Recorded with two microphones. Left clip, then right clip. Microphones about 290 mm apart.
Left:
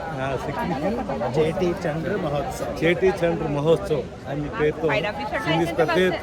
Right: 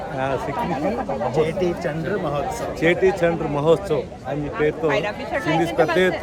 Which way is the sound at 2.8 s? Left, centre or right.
Centre.